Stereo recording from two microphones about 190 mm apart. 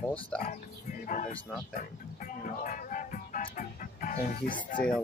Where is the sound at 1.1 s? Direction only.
40° left (ahead or behind).